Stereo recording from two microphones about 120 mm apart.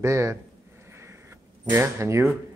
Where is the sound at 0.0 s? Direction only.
25° right (ahead or behind).